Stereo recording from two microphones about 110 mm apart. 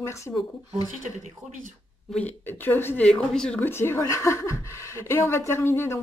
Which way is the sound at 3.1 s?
10° left (ahead or behind).